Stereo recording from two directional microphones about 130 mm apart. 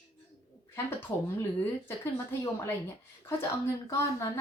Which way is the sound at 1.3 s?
15° left (ahead or behind).